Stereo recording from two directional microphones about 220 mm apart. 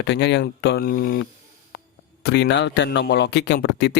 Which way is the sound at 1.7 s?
50° left (ahead or behind).